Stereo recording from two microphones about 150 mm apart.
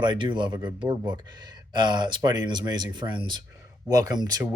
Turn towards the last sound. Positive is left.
turn(degrees=-25)  # may be behind; listen again after turning